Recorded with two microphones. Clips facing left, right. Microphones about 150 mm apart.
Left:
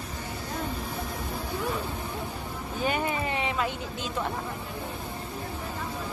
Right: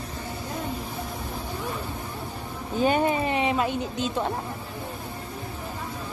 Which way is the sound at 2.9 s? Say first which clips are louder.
Right 5 dB; 25° right (ahead or behind).